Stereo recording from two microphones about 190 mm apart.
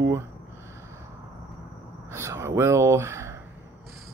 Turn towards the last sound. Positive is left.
turn(degrees=-15)  # may be behind; listen again after turning